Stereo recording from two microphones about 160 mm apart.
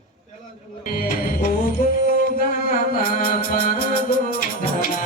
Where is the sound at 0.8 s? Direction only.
60° left (ahead or behind).